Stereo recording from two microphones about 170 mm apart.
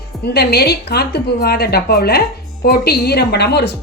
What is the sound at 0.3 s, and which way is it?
A woman's voice, 70° left (ahead or behind).